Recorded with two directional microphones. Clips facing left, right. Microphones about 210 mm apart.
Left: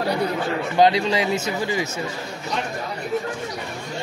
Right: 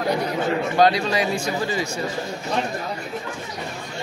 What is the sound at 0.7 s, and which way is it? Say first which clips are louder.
Speech: left 2 dB; 20° left (ahead or behind).